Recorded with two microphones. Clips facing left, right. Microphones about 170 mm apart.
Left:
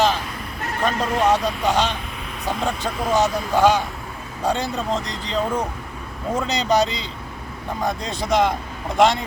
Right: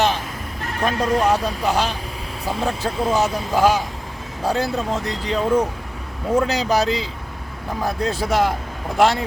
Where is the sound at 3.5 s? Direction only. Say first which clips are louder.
Even; 5° right (ahead or behind).